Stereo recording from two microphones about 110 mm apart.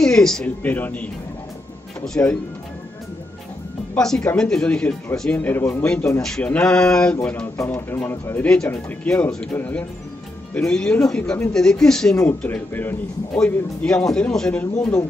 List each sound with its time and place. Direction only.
0.0 s speech: 5° left (ahead or behind)
0.6 s speech: 15° left (ahead or behind)
3.9 s speech: 5° left (ahead or behind)
6.2 s speech: 5° left (ahead or behind)
7.5 s speech: 20° left (ahead or behind)